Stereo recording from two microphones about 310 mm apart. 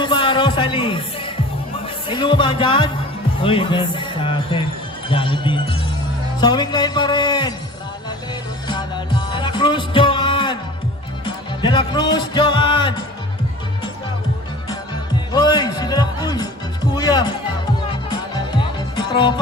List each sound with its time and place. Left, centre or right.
0.0 s music: centre
2.0 s speech: centre
8.6 s music: centre
15.3 s a man's voice: centre
18.9 s music: centre